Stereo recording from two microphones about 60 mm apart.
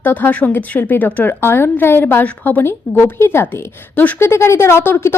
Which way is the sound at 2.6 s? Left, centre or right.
Left.